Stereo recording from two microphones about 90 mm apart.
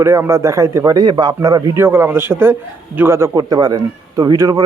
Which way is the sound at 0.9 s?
50° right (ahead or behind).